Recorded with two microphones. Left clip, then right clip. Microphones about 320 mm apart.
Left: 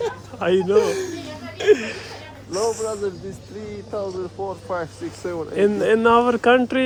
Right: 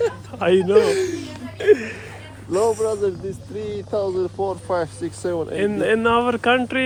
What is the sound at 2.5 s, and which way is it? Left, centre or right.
Speech, right.